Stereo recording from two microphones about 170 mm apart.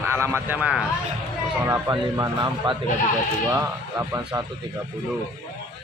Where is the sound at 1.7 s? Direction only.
20° right (ahead or behind).